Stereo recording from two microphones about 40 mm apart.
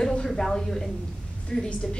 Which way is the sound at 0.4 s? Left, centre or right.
Centre.